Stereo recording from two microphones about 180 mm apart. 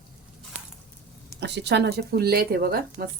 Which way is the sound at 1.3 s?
70° right (ahead or behind).